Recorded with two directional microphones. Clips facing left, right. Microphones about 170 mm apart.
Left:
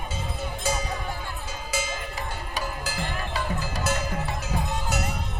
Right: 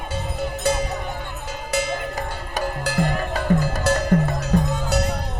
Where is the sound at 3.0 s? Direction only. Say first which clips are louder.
Right 8 dB; 45° right (ahead or behind).